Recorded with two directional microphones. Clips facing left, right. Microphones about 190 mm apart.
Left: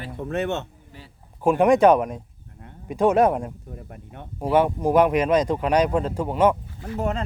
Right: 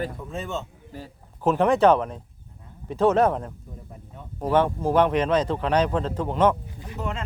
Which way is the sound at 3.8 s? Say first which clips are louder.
Left 3 dB; 75° left (ahead or behind).